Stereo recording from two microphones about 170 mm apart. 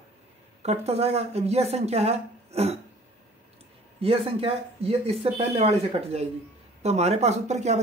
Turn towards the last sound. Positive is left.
turn(degrees=-40)  # may be behind; listen again after turning